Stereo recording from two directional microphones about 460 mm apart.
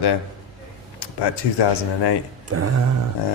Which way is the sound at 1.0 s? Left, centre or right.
Left.